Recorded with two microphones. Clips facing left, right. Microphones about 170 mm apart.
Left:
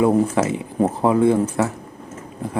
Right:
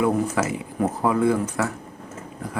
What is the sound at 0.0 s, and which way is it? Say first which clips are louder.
Speech: left 5 dB; 25° left (ahead or behind).